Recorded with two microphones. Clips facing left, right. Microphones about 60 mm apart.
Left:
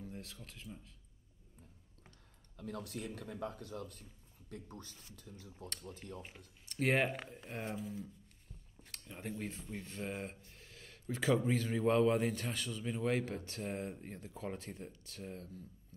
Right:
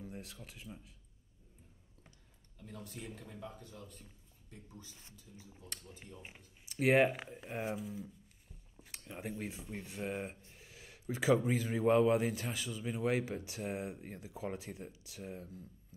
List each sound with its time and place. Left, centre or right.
0.0 s speech: centre
2.5 s speech: left
6.2 s a man's voice: centre